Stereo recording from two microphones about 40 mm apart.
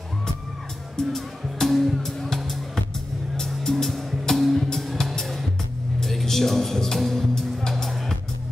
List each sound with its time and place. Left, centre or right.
0.9 s music: centre